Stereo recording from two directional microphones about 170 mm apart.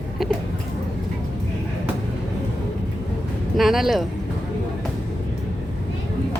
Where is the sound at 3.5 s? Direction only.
Centre (ahead or behind).